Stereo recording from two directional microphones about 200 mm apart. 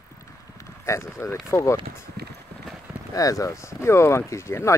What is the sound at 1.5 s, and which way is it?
Speech, 15° left (ahead or behind).